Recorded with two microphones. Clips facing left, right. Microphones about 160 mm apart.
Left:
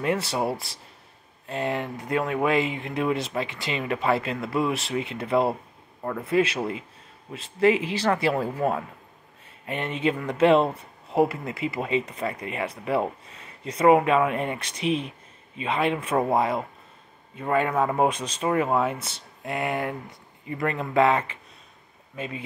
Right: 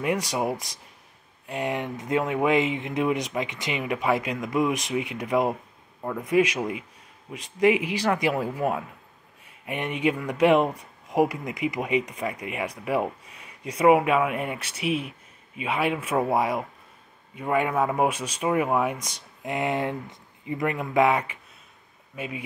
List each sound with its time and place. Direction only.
0.0 s speech: 15° right (ahead or behind)